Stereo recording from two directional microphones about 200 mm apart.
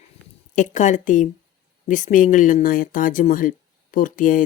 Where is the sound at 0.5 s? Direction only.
40° left (ahead or behind).